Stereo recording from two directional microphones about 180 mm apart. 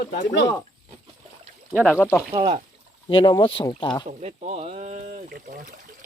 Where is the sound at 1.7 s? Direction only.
10° left (ahead or behind).